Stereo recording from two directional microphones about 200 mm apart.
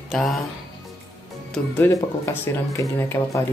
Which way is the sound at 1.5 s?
10° left (ahead or behind).